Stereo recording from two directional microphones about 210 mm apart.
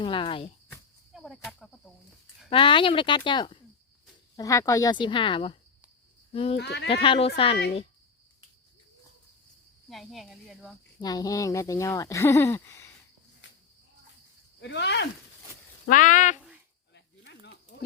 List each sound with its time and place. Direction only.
0.0 s speech: 25° left (ahead or behind)
1.1 s cricket: centre (ahead or behind)
2.5 s speech: 25° left (ahead or behind)
6.6 s speech: 55° left (ahead or behind)
6.9 s speech: 25° left (ahead or behind)
9.9 s speech: centre (ahead or behind)
11.0 s speech: 20° left (ahead or behind)
14.6 s speech: 55° left (ahead or behind)
15.9 s speech: 40° left (ahead or behind)
16.9 s a sound: 55° left (ahead or behind)